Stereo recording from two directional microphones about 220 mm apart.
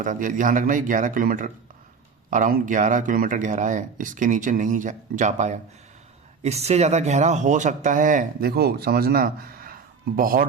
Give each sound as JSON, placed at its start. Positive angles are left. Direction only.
{"t": 0.0, "sound": "speech", "side_deg": -35}